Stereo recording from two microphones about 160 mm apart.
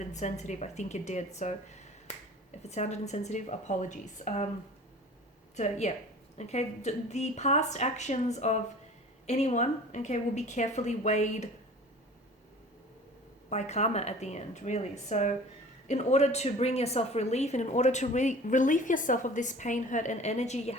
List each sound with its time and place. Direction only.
0.0 s speech: 50° left (ahead or behind)
2.6 s speech: 45° left (ahead or behind)
5.5 s speech: 45° left (ahead or behind)
13.5 s speech: 45° left (ahead or behind)